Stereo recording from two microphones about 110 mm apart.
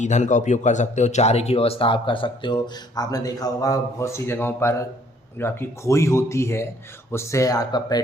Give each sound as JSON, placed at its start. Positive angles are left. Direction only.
{"t": 0.0, "sound": "speech", "side_deg": 90}